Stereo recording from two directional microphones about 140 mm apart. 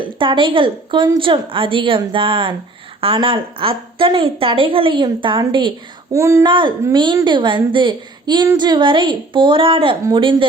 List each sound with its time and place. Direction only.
0.2 s a woman's voice: 35° right (ahead or behind)
6.1 s speech: 20° right (ahead or behind)
6.4 s a woman's voice: 35° right (ahead or behind)